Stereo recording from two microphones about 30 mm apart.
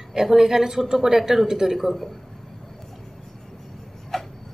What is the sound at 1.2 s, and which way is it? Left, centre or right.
Speech, centre.